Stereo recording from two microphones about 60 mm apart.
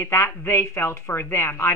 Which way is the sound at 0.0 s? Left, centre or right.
Left.